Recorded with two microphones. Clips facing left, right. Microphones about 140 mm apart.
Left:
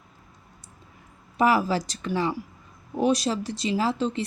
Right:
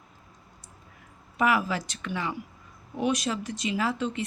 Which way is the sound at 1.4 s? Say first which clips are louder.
Left 4 dB; 35° left (ahead or behind).